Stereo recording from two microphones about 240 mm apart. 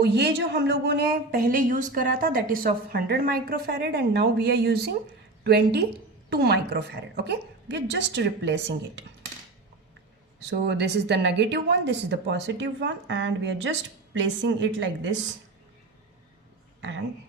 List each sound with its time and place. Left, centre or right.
0.0 s a woman's voice: right
10.4 s a woman's voice: right